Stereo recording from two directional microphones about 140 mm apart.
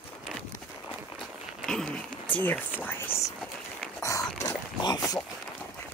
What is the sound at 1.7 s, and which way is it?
Speech, 5° left (ahead or behind).